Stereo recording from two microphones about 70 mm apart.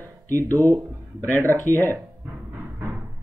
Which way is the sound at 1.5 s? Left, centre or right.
Left.